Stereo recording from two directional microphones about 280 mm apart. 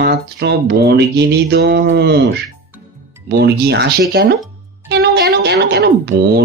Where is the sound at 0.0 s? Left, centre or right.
Right.